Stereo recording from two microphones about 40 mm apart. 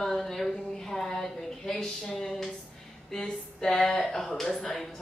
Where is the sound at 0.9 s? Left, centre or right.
Centre.